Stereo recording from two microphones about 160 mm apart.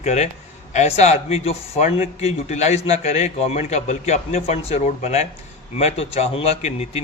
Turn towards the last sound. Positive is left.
turn(degrees=40)  # may be behind; listen again after turning